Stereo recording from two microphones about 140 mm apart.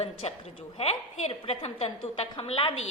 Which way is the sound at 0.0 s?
45° left (ahead or behind).